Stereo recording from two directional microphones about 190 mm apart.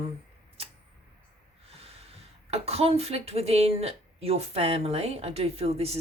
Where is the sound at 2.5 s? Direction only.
30° right (ahead or behind).